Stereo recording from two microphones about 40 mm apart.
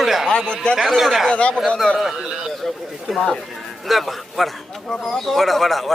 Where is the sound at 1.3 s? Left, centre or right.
Left.